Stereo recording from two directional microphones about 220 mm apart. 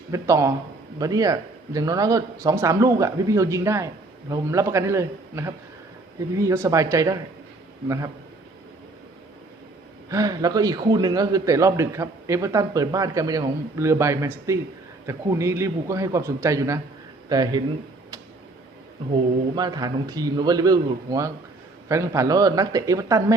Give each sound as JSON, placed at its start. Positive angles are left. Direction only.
{"t": 0.1, "sound": "a man's voice", "side_deg": -15}
{"t": 10.1, "sound": "a man's voice", "side_deg": -15}
{"t": 19.5, "sound": "a man's voice", "side_deg": -15}